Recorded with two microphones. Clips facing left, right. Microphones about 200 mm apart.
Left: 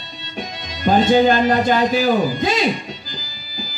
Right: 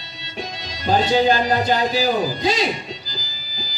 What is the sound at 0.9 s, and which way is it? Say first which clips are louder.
A man's voice: left 3 dB; 55° left (ahead or behind).